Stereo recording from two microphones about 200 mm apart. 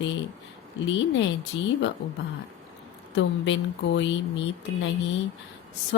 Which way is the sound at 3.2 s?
65° left (ahead or behind).